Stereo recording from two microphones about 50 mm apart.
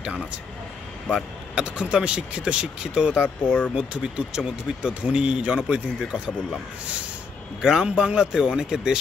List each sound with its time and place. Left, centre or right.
1.1 s speech: centre
7.6 s speech: centre